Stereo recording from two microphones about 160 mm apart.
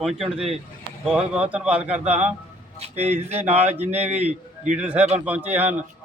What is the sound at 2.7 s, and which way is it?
A man's voice, 40° right (ahead or behind).